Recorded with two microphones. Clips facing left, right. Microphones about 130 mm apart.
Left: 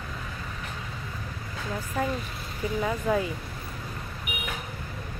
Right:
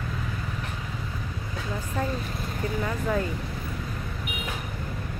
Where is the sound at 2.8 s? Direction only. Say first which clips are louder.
Left 2 dB; 10° left (ahead or behind).